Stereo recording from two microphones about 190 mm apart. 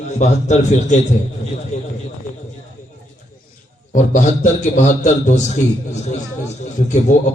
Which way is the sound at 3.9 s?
40° left (ahead or behind).